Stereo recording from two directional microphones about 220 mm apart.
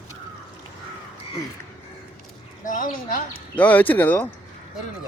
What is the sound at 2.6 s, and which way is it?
Speech, 35° left (ahead or behind).